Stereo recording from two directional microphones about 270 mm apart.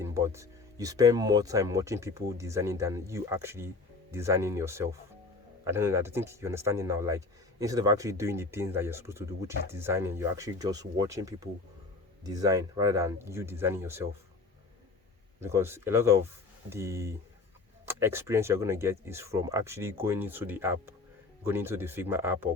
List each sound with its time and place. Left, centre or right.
0.0 s speech: centre
15.4 s speech: centre